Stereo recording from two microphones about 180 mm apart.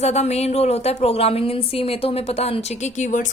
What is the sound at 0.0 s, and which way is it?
A woman's voice, 40° left (ahead or behind).